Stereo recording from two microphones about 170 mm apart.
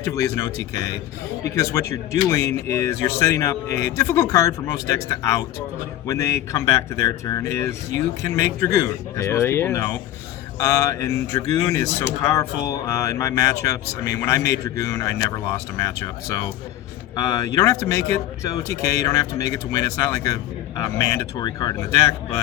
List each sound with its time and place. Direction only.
0.0 s speech: 20° left (ahead or behind)